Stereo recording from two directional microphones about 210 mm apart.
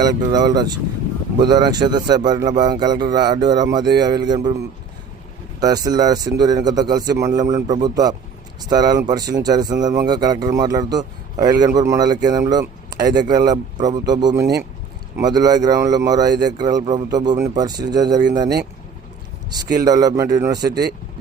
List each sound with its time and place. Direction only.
0.0 s speech: 20° right (ahead or behind)
5.5 s speech: 20° right (ahead or behind)
19.8 s a man's voice: 15° right (ahead or behind)
20.7 s speech: 50° right (ahead or behind)